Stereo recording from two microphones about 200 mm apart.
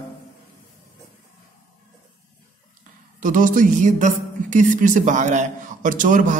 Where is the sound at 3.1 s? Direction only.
40° right (ahead or behind).